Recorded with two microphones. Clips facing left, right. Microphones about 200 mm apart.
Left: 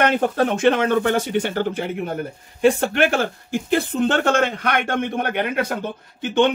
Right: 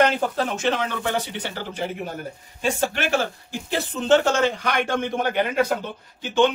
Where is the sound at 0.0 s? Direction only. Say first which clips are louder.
Left 2 dB; 60° left (ahead or behind).